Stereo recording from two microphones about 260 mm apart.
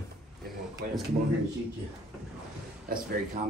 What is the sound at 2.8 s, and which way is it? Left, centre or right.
Speech, right.